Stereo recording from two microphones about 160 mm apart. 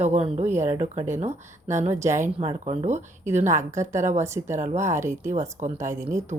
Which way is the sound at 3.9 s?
50° right (ahead or behind).